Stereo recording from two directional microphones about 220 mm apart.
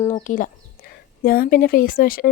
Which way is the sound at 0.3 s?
35° left (ahead or behind).